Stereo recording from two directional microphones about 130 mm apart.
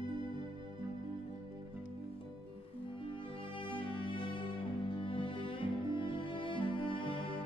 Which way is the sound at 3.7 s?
40° left (ahead or behind).